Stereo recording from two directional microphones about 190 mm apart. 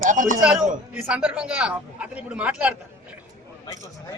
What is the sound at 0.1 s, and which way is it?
Speech, 45° right (ahead or behind).